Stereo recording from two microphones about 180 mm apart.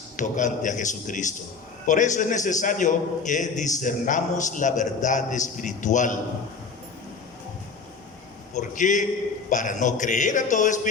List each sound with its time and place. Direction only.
0.2 s a man's voice: 45° left (ahead or behind)
8.5 s a man's voice: 45° left (ahead or behind)